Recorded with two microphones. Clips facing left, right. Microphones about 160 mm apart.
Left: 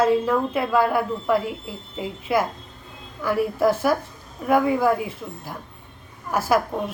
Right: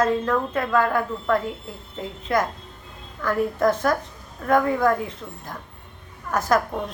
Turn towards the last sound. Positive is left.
turn(degrees=10)  # may be behind; listen again after turning